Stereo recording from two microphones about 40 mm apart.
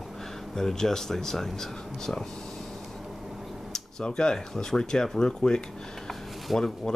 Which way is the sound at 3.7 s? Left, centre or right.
Centre.